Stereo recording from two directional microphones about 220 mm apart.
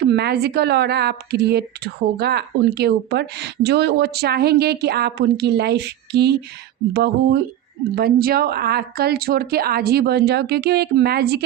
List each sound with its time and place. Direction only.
0.2 s speech: 50° right (ahead or behind)